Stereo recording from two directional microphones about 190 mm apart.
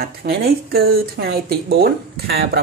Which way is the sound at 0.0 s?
55° right (ahead or behind).